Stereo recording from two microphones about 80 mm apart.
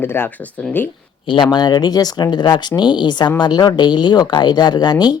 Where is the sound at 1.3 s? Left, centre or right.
Left.